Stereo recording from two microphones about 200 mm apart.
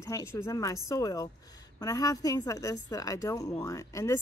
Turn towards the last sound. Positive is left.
turn(degrees=15)  # may be behind; listen again after turning